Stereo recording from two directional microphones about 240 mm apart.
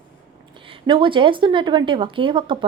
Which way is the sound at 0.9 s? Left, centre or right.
Right.